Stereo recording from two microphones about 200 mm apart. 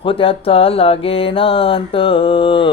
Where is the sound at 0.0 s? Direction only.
25° left (ahead or behind).